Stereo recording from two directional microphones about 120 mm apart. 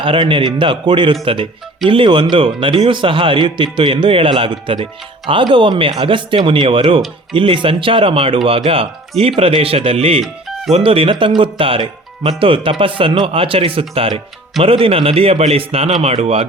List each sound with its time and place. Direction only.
0.0 s a man's voice: 45° right (ahead or behind); by 16.5 s 60° right (ahead or behind)